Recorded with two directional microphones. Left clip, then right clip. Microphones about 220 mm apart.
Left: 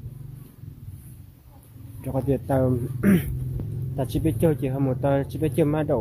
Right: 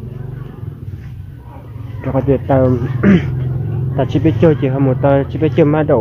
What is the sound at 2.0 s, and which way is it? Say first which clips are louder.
Speech: right 11 dB; 20° left (ahead or behind).